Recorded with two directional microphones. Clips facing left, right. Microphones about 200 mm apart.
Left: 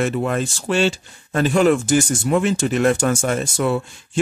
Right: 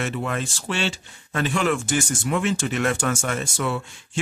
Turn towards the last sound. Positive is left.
turn(degrees=40)  # may be behind; listen again after turning